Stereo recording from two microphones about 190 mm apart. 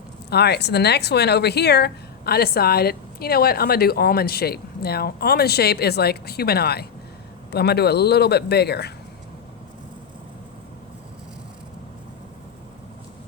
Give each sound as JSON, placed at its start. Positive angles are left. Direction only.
{"t": 0.3, "sound": "speech", "side_deg": 60}